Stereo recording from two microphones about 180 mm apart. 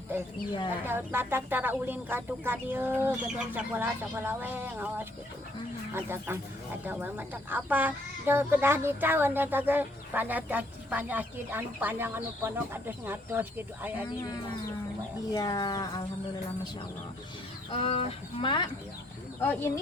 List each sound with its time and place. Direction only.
0.9 s speech: 10° right (ahead or behind)
15.3 s speech: 20° left (ahead or behind)
17.7 s speech: 35° left (ahead or behind)
19.4 s speech: 15° left (ahead or behind)